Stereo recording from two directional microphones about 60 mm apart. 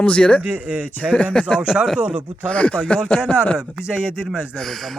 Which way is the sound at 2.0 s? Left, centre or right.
Right.